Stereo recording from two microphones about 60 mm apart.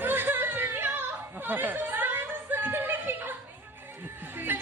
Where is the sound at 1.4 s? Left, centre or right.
Right.